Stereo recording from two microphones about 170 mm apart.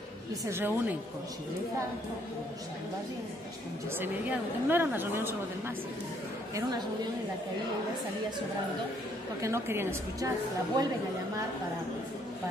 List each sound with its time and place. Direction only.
0.5 s a woman's voice: 15° right (ahead or behind)
4.0 s a woman's voice: 10° right (ahead or behind)
9.4 s a woman's voice: 15° right (ahead or behind)